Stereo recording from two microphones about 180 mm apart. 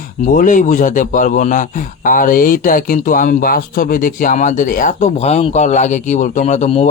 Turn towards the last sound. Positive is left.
turn(degrees=40)  # may be behind; listen again after turning